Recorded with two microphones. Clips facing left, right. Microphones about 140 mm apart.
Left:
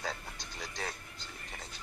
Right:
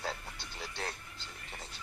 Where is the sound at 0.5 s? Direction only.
5° right (ahead or behind).